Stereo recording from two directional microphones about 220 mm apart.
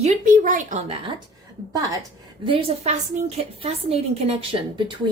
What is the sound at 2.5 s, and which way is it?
A woman's voice, 30° right (ahead or behind).